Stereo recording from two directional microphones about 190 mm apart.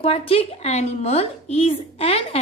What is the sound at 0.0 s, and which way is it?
A woman's voice, 30° left (ahead or behind).